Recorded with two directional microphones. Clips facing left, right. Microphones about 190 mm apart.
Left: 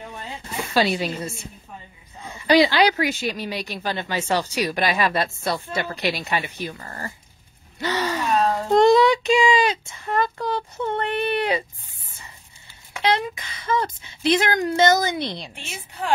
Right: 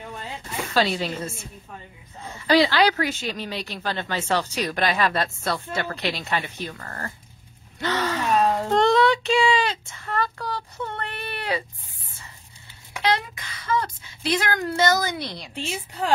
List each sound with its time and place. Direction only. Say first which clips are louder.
0.7 s speech: left 2 dB; 15° left (ahead or behind)
2.3 s speech: left 2 dB; 15° left (ahead or behind)
7.8 s gasp: left 1 dB; 10° left (ahead or behind)
8.6 s speech: left 6 dB; 10° left (ahead or behind)
13.0 s speech: left 2 dB; 20° left (ahead or behind)